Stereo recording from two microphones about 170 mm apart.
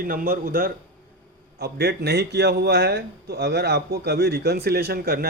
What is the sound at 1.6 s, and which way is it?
Speech, 70° right (ahead or behind).